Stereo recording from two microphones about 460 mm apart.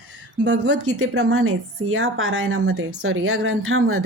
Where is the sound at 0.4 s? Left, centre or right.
Right.